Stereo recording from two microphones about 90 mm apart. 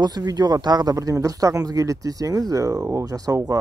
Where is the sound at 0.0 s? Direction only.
50° right (ahead or behind).